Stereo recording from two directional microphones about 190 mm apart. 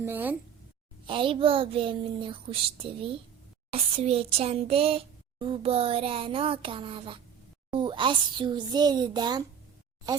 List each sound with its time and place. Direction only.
0.0 s speech: 10° right (ahead or behind)
1.0 s speech: 25° right (ahead or behind)